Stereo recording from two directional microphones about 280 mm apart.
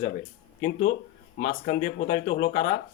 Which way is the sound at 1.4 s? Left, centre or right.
Left.